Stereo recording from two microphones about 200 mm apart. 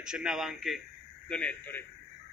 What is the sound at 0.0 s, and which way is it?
A man's voice, 5° right (ahead or behind).